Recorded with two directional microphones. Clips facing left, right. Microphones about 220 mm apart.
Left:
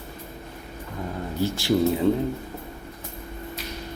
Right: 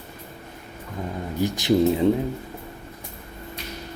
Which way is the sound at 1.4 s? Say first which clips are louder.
Right 2 dB; 20° right (ahead or behind).